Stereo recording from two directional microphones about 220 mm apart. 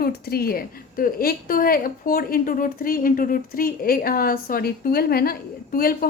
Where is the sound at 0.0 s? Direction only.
45° left (ahead or behind).